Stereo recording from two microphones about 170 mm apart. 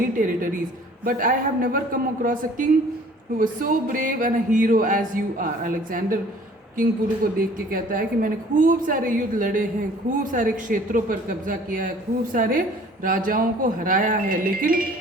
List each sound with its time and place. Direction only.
0.2 s a woman's voice: 55° right (ahead or behind)